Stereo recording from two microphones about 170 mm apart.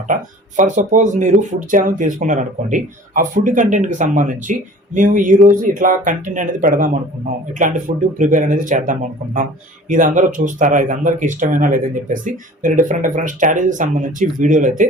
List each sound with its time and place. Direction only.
0.1 s speech: 50° right (ahead or behind)